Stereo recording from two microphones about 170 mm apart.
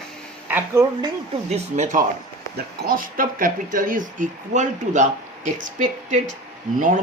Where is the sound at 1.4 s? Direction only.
40° right (ahead or behind).